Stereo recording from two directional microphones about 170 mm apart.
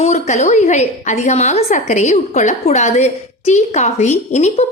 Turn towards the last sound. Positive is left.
turn(degrees=40)  # may be behind; listen again after turning